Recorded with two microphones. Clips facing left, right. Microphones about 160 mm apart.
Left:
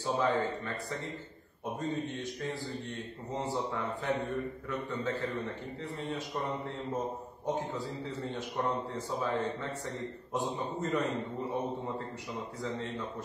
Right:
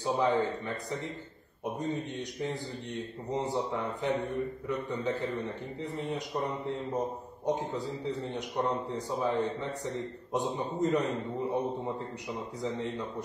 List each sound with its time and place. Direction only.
0.0 s a man's voice: 20° right (ahead or behind)
12.6 s a man's voice: 20° right (ahead or behind)